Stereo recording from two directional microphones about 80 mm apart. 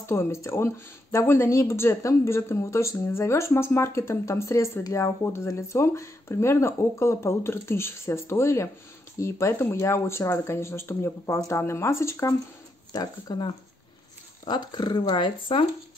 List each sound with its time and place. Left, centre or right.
0.0 s speech: left
12.9 s speech: left